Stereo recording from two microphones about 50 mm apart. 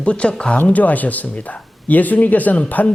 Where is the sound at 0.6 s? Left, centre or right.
Left.